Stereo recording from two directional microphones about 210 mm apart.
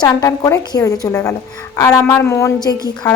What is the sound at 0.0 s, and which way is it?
A woman's voice, 15° left (ahead or behind).